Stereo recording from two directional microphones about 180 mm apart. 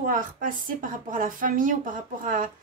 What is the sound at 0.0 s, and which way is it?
A woman's voice, 50° right (ahead or behind).